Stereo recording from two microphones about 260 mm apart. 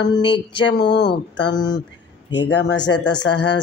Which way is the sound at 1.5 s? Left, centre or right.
Centre.